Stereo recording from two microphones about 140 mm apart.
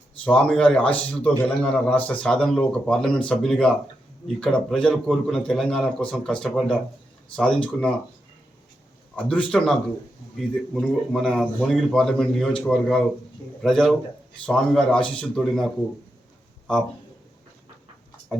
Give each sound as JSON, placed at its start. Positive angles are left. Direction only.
{"t": 0.3, "sound": "speech", "side_deg": 5}
{"t": 9.3, "sound": "speech", "side_deg": 5}
{"t": 10.8, "sound": "speech", "side_deg": 5}